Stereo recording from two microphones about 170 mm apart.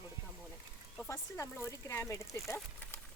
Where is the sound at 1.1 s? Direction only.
15° left (ahead or behind).